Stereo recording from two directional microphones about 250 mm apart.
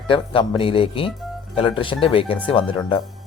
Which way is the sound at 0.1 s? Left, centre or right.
Centre.